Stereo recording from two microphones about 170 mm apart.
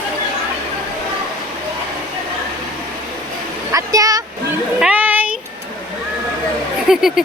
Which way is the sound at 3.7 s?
20° right (ahead or behind).